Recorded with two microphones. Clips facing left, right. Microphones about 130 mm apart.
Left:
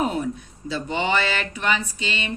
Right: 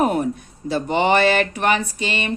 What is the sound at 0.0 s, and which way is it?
Speech, 55° right (ahead or behind).